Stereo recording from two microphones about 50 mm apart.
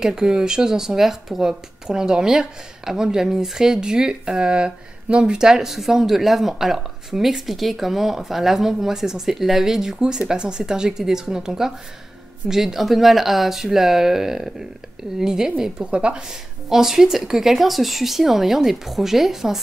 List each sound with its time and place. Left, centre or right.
0.0 s speech: centre
16.3 s speech: centre